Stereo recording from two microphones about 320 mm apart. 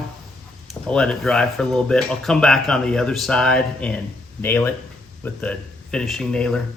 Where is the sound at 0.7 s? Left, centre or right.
Centre.